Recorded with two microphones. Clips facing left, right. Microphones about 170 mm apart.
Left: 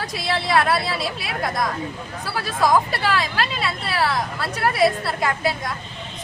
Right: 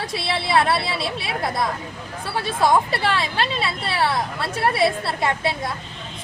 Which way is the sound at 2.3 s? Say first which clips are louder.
Even; 25° right (ahead or behind).